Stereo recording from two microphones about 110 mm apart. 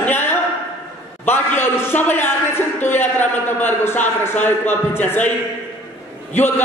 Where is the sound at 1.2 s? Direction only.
20° left (ahead or behind).